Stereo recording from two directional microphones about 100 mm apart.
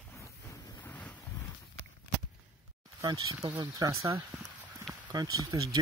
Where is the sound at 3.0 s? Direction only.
40° right (ahead or behind).